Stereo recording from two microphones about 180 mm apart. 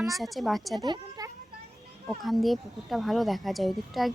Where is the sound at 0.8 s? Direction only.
20° right (ahead or behind).